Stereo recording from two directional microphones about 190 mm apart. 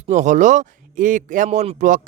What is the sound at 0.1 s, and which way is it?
Speech, 40° right (ahead or behind).